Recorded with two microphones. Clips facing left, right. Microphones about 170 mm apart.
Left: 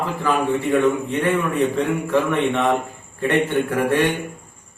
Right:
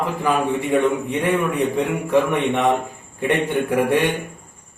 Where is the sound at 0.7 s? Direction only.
15° right (ahead or behind).